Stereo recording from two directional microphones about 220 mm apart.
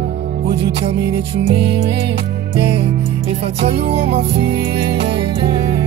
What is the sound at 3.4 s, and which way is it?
Music, 25° right (ahead or behind).